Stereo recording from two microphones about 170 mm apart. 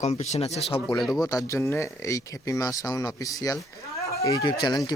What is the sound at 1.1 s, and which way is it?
Speech, 20° left (ahead or behind).